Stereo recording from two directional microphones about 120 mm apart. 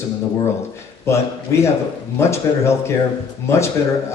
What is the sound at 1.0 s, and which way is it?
A man's voice, 20° left (ahead or behind).